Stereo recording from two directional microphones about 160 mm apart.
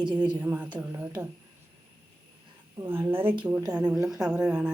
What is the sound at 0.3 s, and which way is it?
Speech, 10° right (ahead or behind).